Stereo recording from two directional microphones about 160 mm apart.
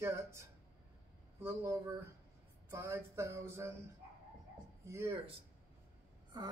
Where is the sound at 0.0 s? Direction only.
15° right (ahead or behind).